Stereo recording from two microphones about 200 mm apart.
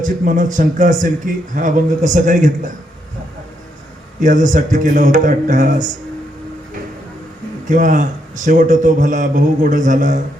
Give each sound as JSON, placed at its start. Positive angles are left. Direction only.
{"t": 0.0, "sound": "a man's voice", "side_deg": -40}
{"t": 4.2, "sound": "a man's voice", "side_deg": -40}
{"t": 7.7, "sound": "a man's voice", "side_deg": -40}